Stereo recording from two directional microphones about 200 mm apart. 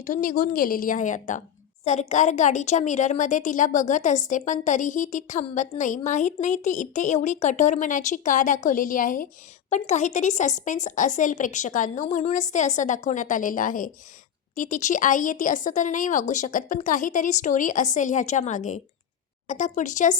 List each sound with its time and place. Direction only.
0.0 s a woman's voice: 40° left (ahead or behind)